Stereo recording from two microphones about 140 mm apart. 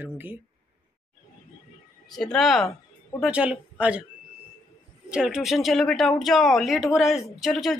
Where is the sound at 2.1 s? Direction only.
5° left (ahead or behind).